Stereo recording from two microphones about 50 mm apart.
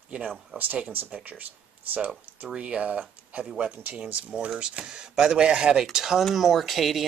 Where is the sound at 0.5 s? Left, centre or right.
Right.